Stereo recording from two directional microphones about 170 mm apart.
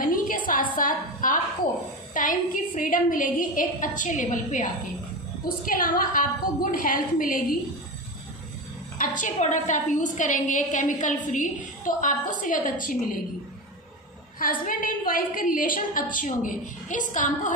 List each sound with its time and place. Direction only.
0.0 s a sound: 55° left (ahead or behind)
0.7 s a woman's voice: 50° left (ahead or behind)
8.9 s a woman's voice: 50° left (ahead or behind)
14.4 s a woman's voice: 55° left (ahead or behind)